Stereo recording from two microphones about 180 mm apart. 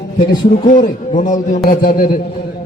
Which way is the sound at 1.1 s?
45° left (ahead or behind).